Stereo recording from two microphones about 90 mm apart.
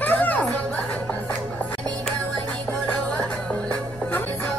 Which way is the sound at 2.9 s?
15° left (ahead or behind).